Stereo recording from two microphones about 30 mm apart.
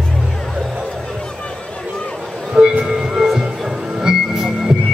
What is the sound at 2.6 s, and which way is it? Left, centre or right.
Music, centre.